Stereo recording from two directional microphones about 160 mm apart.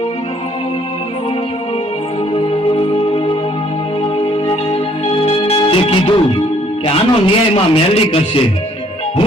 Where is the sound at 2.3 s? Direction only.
35° left (ahead or behind).